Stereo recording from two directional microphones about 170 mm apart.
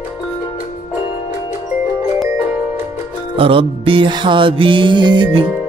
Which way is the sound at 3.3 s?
30° right (ahead or behind).